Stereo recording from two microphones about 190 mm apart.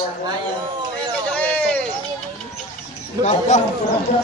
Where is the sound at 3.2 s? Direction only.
35° left (ahead or behind).